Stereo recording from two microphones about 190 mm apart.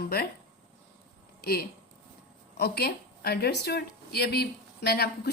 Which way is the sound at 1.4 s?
55° left (ahead or behind).